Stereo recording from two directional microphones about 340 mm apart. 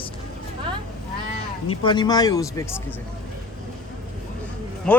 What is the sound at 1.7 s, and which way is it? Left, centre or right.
Speech, centre.